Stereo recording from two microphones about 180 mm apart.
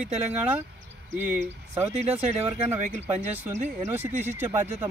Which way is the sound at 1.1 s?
15° right (ahead or behind).